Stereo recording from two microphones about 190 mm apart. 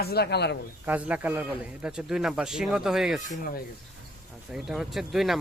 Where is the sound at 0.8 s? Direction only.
10° right (ahead or behind).